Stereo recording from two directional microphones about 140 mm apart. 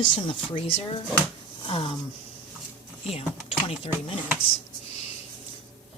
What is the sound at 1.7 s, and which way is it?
Speech, 40° left (ahead or behind).